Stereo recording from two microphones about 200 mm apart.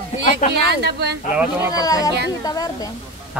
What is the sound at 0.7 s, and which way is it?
Speech, 60° right (ahead or behind).